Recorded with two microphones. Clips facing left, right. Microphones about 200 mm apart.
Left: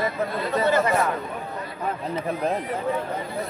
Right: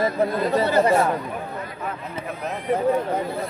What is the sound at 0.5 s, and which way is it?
Speech, 35° right (ahead or behind).